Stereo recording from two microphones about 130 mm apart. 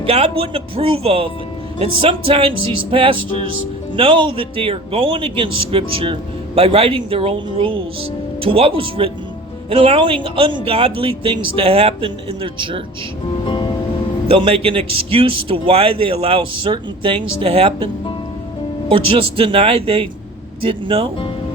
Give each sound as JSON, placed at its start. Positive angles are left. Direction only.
{"t": 0.0, "sound": "a man's voice", "side_deg": -50}
{"t": 13.4, "sound": "music", "side_deg": 35}
{"t": 14.3, "sound": "a man's voice", "side_deg": -50}
{"t": 18.9, "sound": "a man's voice", "side_deg": -45}